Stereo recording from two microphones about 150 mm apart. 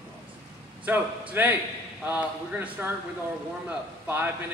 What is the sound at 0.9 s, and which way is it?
Speech, 10° right (ahead or behind).